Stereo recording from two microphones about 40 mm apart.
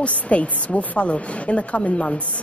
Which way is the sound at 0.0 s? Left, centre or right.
Left.